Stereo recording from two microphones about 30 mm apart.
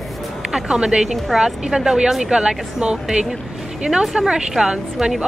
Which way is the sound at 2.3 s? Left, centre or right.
Right.